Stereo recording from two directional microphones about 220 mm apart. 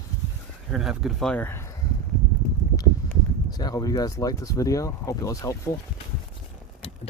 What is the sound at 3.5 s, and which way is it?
Speech, 15° left (ahead or behind).